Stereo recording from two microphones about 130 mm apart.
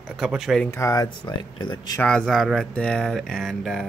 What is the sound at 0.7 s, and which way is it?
Speech, 25° left (ahead or behind).